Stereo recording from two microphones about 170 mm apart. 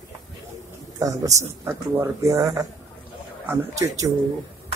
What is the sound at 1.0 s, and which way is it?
A man's voice, 20° right (ahead or behind).